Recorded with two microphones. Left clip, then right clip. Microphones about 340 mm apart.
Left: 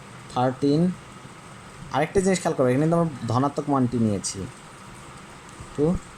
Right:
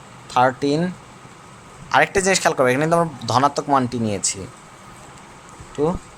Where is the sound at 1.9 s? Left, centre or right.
Right.